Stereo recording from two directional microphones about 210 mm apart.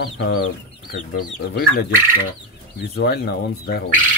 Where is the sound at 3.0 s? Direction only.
50° left (ahead or behind).